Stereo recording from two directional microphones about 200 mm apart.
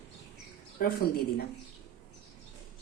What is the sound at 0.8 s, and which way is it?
Speech, 45° left (ahead or behind).